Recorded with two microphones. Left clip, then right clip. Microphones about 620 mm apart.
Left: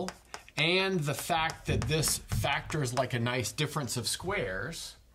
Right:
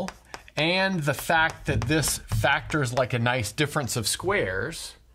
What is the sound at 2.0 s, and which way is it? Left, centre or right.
Speech, right.